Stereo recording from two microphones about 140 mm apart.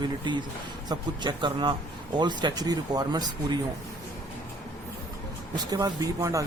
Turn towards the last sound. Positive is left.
turn(degrees=-25)  # may be behind; listen again after turning